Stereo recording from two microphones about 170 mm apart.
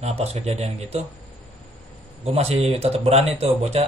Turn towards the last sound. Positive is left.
turn(degrees=-35)  # may be behind; listen again after turning